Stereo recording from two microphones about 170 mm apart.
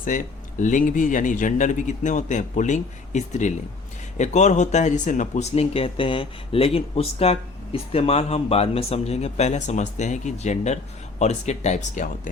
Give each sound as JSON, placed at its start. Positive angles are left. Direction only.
{"t": 0.0, "sound": "speech", "side_deg": 50}